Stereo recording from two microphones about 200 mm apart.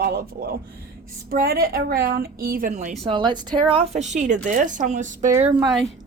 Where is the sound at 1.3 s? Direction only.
45° right (ahead or behind).